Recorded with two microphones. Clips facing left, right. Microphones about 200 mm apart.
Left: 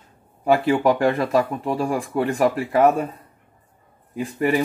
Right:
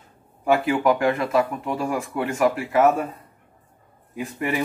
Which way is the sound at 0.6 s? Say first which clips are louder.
Left 2 dB; 35° left (ahead or behind).